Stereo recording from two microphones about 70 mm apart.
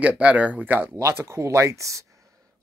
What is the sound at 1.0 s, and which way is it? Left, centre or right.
Speech, right.